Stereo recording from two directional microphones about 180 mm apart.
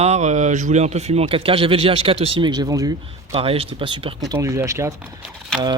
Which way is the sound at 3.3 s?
30° right (ahead or behind).